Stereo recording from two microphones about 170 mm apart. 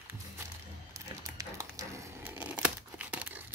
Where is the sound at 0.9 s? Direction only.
20° right (ahead or behind).